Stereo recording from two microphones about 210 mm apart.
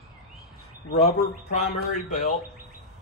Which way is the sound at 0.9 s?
35° left (ahead or behind).